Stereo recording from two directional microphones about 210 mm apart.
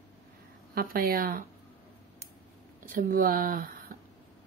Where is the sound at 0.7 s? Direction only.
45° right (ahead or behind).